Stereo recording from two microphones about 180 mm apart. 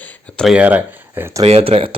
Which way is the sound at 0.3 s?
5° right (ahead or behind).